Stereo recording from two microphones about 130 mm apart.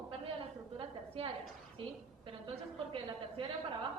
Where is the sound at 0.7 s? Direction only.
45° right (ahead or behind).